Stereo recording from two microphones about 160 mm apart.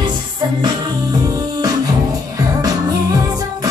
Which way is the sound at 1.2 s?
25° right (ahead or behind).